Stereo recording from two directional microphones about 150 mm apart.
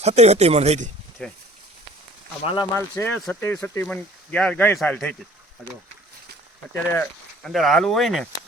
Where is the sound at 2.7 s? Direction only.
15° left (ahead or behind).